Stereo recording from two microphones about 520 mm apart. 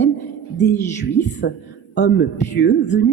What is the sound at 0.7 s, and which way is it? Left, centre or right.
Speech, centre.